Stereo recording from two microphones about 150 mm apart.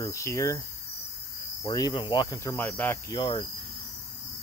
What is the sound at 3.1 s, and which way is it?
Cricket, 30° left (ahead or behind).